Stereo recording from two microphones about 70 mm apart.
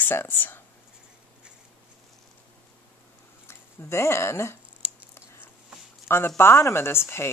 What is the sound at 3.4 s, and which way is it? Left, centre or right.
Speech, left.